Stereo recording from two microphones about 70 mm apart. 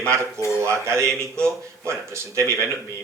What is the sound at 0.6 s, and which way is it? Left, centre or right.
Speech, right.